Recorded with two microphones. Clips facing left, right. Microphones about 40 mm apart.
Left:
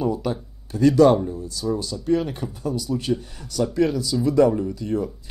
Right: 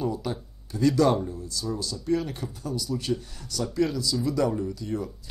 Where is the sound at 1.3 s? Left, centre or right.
Left.